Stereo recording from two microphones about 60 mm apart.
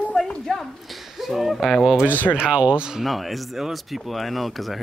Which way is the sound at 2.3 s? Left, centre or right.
Centre.